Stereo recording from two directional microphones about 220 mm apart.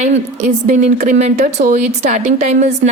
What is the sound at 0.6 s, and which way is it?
Speech, 35° right (ahead or behind).